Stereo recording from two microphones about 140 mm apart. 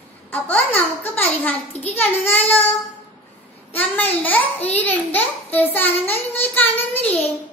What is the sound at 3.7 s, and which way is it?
A child's voice, 10° left (ahead or behind).